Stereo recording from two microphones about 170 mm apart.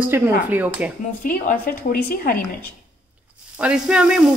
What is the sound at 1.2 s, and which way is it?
A woman's voice, 55° left (ahead or behind).